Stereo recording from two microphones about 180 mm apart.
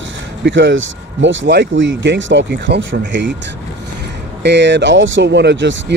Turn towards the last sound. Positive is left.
turn(degrees=-80)